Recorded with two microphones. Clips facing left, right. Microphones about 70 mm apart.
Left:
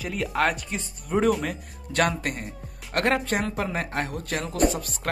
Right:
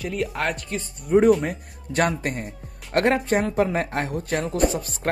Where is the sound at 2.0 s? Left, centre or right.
Right.